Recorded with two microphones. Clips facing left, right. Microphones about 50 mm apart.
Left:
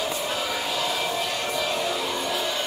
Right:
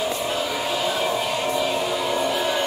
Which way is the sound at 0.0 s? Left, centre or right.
Centre.